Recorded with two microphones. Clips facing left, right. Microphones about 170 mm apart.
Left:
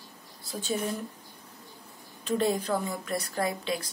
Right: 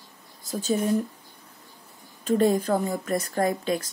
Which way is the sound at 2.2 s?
45° right (ahead or behind).